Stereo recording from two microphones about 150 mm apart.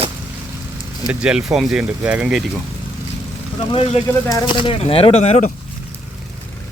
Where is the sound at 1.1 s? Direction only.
5° right (ahead or behind).